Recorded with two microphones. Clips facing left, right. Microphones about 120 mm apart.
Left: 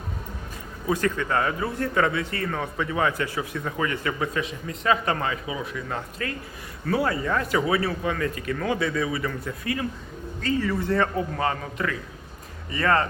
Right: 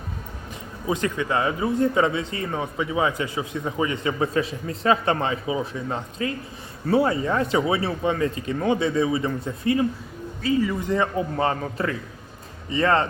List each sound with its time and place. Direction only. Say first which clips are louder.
0.9 s a man's voice: even; 15° right (ahead or behind)
4.4 s a man's voice: right 5 dB; 35° right (ahead or behind)
10.4 s a man's voice: right 2 dB; 15° right (ahead or behind)
11.4 s a man's voice: right 2 dB; 30° right (ahead or behind)